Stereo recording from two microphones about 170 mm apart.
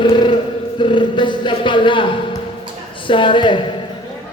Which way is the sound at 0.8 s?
30° left (ahead or behind).